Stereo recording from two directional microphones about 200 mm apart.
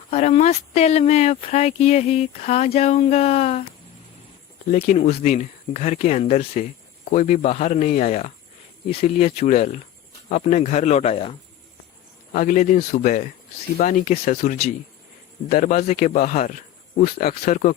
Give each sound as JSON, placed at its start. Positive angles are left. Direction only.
{"t": 0.1, "sound": "speech", "side_deg": 35}
{"t": 4.7, "sound": "speech", "side_deg": 35}
{"t": 12.3, "sound": "speech", "side_deg": 40}